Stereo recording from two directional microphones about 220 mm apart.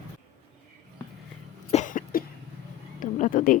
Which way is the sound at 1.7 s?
35° left (ahead or behind).